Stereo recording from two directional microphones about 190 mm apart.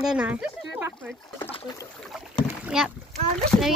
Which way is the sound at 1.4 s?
30° left (ahead or behind).